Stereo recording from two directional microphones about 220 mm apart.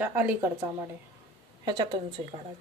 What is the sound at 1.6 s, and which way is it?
Speech, 20° right (ahead or behind).